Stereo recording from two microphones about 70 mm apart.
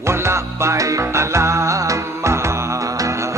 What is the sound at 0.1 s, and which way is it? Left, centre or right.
Music, right.